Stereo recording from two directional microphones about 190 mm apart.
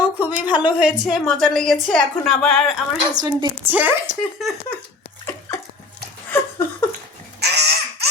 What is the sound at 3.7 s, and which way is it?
Speech, 10° right (ahead or behind).